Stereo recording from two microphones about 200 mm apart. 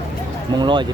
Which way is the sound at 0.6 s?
25° right (ahead or behind).